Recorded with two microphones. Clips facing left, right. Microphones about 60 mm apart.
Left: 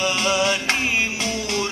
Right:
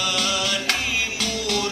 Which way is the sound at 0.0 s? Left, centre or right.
Left.